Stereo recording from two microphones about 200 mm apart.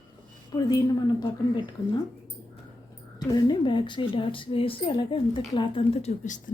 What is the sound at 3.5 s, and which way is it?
A woman's voice, 25° left (ahead or behind).